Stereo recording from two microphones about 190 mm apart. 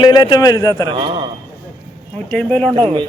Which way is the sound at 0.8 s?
25° right (ahead or behind).